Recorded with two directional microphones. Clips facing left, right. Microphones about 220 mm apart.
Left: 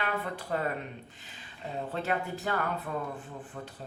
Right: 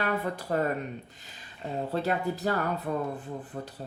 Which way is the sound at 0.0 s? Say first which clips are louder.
Right 4 dB; 40° right (ahead or behind).